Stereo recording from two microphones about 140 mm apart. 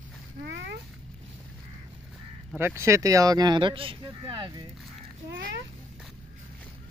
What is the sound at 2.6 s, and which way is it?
Speech, 20° right (ahead or behind).